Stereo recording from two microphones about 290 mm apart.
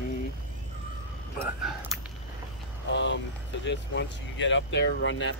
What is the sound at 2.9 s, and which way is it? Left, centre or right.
Vehicle, left.